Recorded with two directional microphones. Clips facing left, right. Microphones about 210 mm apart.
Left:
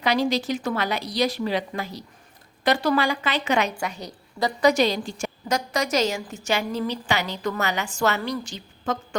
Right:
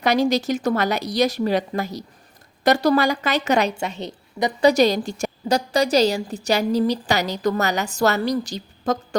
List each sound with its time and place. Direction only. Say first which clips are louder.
0.0 s a woman's voice: right 4 dB; 45° right (ahead or behind)
3.8 s a woman's voice: right 3 dB; 25° right (ahead or behind)
4.6 s a woman's voice: right 4 dB; 40° right (ahead or behind)